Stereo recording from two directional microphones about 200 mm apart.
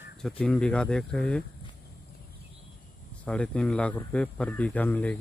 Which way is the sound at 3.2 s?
5° left (ahead or behind).